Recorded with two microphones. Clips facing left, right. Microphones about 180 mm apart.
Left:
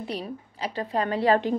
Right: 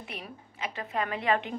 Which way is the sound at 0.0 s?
30° left (ahead or behind).